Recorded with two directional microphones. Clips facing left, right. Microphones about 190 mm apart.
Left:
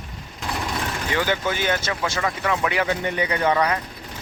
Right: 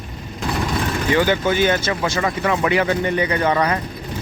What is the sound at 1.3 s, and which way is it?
Speech, centre (ahead or behind).